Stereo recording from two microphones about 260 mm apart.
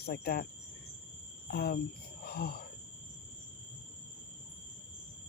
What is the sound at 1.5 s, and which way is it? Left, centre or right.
Speech, left.